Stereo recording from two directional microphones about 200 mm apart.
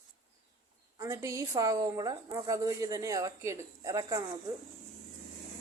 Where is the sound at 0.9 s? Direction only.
15° right (ahead or behind).